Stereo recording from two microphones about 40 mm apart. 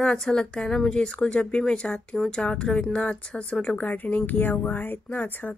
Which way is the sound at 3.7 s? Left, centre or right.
Left.